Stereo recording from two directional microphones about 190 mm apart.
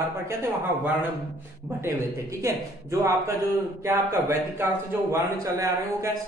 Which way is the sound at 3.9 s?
15° right (ahead or behind).